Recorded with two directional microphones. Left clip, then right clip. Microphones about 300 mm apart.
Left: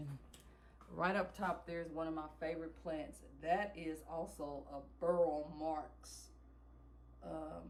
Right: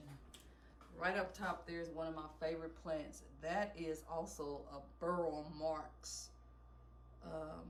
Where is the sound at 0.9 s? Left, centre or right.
Centre.